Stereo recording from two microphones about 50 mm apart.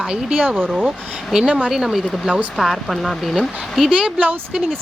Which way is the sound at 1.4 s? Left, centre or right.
Right.